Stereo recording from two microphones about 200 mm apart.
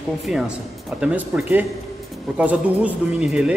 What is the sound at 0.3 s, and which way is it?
Speech, 5° right (ahead or behind).